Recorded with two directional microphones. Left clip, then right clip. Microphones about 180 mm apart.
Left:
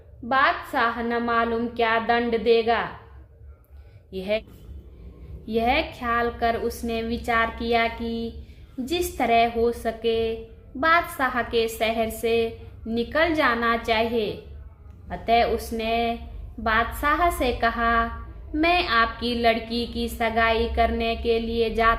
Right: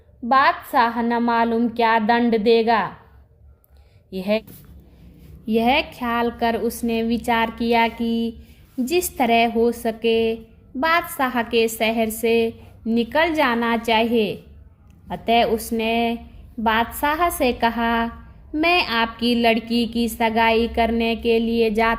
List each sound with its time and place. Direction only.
0.3 s a woman's voice: 45° right (ahead or behind)
4.1 s a woman's voice: 45° right (ahead or behind)
5.5 s a woman's voice: 45° right (ahead or behind)